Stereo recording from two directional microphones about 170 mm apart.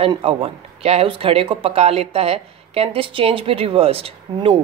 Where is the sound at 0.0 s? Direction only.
35° right (ahead or behind).